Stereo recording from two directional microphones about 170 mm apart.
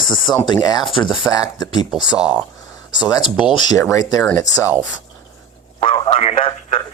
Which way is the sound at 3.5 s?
25° left (ahead or behind).